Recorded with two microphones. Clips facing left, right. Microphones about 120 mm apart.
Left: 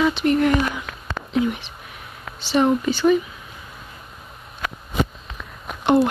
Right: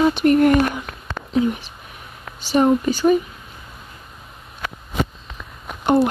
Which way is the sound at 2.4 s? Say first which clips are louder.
Right 2 dB; 45° right (ahead or behind).